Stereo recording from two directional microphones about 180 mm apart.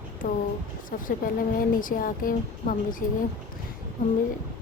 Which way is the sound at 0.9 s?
50° left (ahead or behind).